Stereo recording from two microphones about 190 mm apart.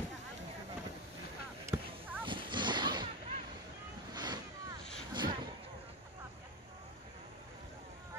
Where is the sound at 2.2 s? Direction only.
25° right (ahead or behind).